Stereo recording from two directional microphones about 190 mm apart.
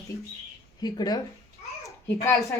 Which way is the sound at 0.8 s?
20° left (ahead or behind).